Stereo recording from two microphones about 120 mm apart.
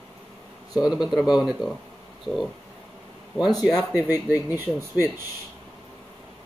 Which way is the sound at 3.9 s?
15° right (ahead or behind).